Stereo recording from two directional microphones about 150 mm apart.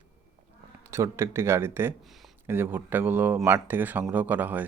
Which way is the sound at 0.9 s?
20° right (ahead or behind).